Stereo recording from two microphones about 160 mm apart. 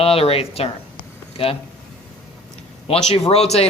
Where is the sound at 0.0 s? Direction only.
35° left (ahead or behind).